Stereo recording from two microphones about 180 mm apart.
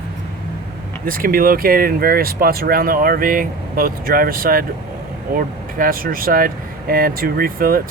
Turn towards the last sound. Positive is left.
turn(degrees=-55)  # may be behind; listen again after turning